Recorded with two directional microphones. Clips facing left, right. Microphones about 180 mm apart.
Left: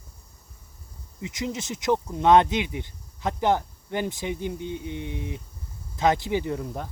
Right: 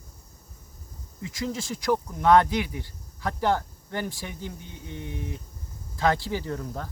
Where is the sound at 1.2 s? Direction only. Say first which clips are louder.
Even; 20° left (ahead or behind).